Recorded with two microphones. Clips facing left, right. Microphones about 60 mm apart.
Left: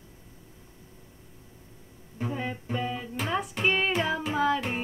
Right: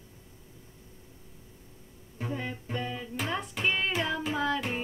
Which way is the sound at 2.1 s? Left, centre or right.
Centre.